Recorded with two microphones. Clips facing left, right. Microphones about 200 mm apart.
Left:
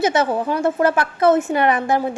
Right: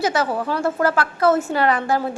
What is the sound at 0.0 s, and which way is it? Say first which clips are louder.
A woman's voice: left 3 dB; 20° left (ahead or behind).